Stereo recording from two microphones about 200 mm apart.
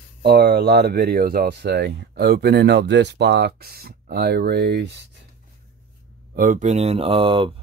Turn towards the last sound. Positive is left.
turn(degrees=-25)  # may be behind; listen again after turning